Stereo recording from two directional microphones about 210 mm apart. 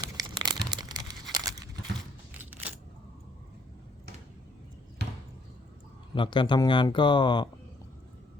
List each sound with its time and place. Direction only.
0.0 s crumpling: 20° right (ahead or behind)
6.1 s speech: 25° left (ahead or behind)